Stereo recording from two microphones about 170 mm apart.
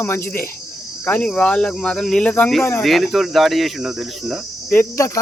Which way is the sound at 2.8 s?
Centre (ahead or behind).